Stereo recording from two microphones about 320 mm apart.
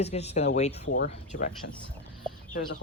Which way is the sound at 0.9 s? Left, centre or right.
Left.